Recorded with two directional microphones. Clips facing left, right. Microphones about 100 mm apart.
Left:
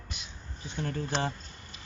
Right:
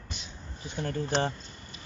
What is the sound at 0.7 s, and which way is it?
Speech, centre (ahead or behind).